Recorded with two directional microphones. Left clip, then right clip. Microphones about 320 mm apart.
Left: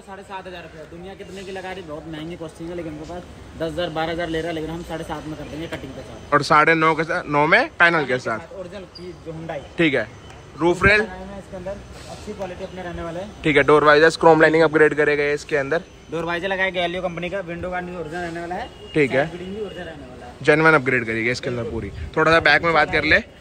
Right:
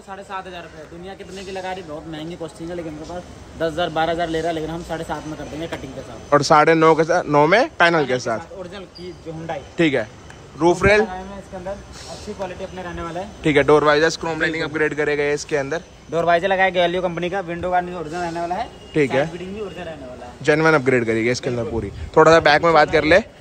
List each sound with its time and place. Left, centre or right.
0.1 s a man's voice: centre
3.5 s a man's voice: centre
6.3 s a man's voice: centre
9.5 s a man's voice: centre
13.4 s a man's voice: centre
16.1 s a man's voice: right
18.9 s a man's voice: centre
20.4 s a man's voice: centre